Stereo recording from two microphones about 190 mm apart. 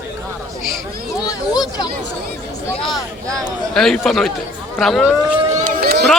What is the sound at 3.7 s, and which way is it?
Speech, centre (ahead or behind).